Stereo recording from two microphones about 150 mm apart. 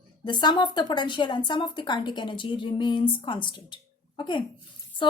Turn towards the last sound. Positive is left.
turn(degrees=35)  # may be behind; listen again after turning